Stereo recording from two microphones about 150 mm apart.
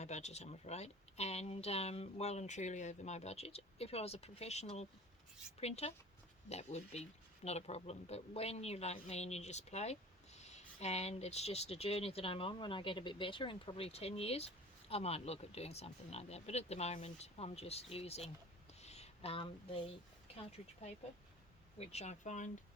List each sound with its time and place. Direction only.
0.0 s speech: 50° left (ahead or behind)
18.8 s a sound: 45° left (ahead or behind)
21.8 s speech: 45° left (ahead or behind)